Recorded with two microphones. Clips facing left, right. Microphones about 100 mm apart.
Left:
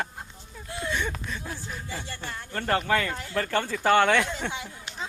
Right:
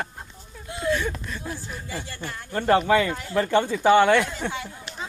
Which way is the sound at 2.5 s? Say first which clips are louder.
Right 6 dB; 20° right (ahead or behind).